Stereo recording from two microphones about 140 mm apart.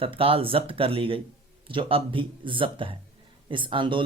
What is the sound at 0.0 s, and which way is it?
A man's voice, 40° right (ahead or behind).